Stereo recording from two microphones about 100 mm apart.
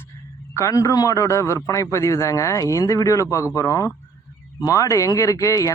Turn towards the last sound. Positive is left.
turn(degrees=35)  # may be behind; listen again after turning